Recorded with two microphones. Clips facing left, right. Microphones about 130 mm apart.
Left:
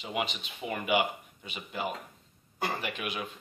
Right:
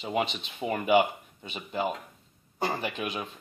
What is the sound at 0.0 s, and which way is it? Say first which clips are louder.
Speech: right 4 dB; 30° right (ahead or behind).